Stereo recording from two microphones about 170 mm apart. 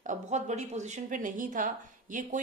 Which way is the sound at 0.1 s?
45° right (ahead or behind).